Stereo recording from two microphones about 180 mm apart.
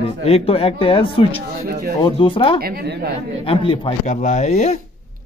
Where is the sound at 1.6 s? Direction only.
60° right (ahead or behind).